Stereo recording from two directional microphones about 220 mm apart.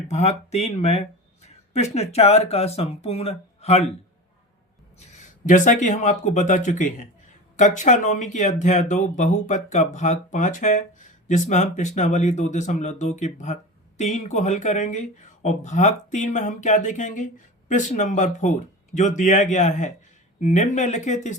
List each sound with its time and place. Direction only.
0.1 s speech: 30° left (ahead or behind)
5.5 s speech: 35° left (ahead or behind)